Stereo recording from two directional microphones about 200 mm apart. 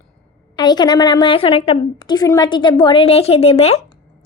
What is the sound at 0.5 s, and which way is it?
A woman's voice, 20° left (ahead or behind).